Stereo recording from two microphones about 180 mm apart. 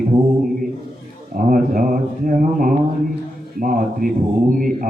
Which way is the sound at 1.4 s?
50° right (ahead or behind).